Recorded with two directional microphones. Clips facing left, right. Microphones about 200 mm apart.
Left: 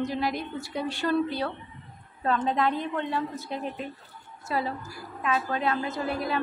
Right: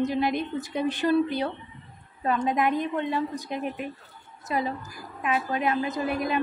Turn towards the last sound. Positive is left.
turn(degrees=-20)  # may be behind; listen again after turning